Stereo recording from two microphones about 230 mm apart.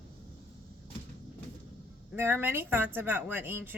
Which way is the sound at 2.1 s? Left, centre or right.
Centre.